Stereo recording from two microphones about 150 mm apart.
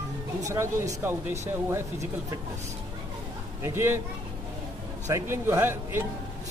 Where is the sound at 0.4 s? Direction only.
20° right (ahead or behind).